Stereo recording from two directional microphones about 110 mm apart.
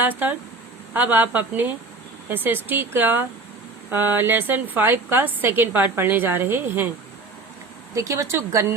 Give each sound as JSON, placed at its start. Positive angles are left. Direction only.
{"t": 0.0, "sound": "a woman's voice", "side_deg": -15}
{"t": 7.9, "sound": "a woman's voice", "side_deg": -30}